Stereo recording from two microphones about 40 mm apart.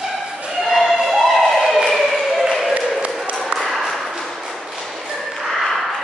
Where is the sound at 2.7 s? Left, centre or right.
Right.